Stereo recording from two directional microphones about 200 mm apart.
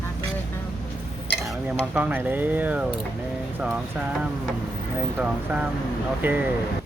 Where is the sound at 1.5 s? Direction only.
5° right (ahead or behind).